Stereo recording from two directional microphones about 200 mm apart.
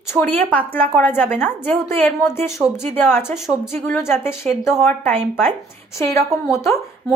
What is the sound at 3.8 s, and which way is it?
A woman's voice, 10° left (ahead or behind).